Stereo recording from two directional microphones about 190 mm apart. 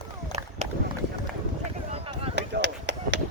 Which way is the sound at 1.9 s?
35° right (ahead or behind).